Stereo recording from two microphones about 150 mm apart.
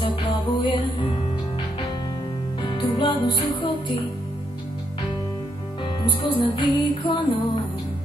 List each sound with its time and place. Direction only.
0.0 s music: 35° left (ahead or behind)
2.6 s music: 30° left (ahead or behind)
6.0 s music: 30° left (ahead or behind)